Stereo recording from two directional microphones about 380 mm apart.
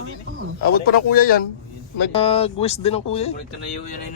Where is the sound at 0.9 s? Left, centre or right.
Left.